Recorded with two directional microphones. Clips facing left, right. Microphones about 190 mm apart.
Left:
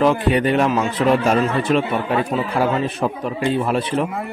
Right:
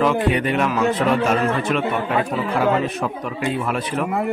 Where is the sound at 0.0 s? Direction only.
35° left (ahead or behind).